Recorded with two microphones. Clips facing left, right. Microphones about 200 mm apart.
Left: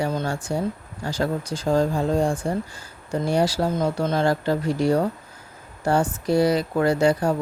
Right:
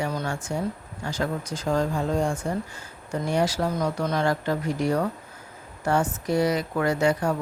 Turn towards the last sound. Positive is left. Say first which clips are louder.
# left 3 dB
turn(degrees=30)  # may be behind; listen again after turning